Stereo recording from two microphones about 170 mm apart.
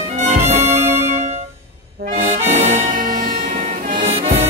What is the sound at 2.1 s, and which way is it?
Accordion, 50° right (ahead or behind).